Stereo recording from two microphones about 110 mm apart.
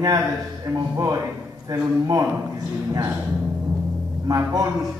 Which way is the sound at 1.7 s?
35° right (ahead or behind).